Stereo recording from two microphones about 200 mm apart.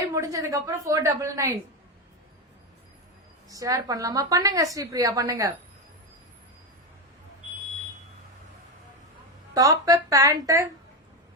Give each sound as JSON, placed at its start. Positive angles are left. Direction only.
{"t": 0.1, "sound": "a woman's voice", "side_deg": -15}
{"t": 3.5, "sound": "a woman's voice", "side_deg": -15}
{"t": 9.6, "sound": "a woman's voice", "side_deg": -15}